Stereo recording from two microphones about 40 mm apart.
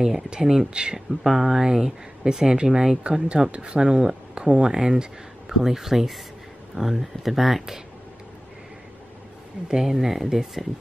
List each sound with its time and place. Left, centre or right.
0.0 s speech: centre
5.6 s speech: centre
9.7 s speech: centre